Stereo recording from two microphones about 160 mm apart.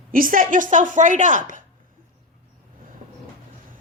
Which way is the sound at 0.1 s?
60° right (ahead or behind).